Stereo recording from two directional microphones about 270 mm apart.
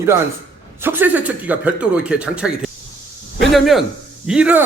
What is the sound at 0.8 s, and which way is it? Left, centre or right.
Speech, centre.